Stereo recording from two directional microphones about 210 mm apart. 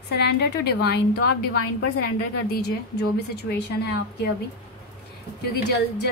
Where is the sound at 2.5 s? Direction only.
50° left (ahead or behind).